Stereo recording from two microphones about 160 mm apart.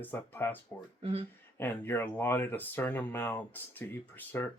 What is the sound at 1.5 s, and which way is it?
Speech, 15° left (ahead or behind).